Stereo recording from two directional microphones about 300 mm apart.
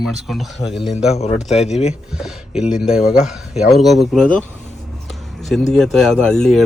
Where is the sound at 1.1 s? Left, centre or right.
Left.